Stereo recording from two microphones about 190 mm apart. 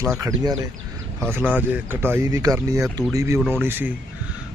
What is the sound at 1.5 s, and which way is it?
Speech, 10° right (ahead or behind).